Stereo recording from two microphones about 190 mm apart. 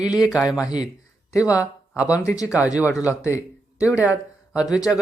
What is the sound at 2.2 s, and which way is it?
Speech, 15° left (ahead or behind).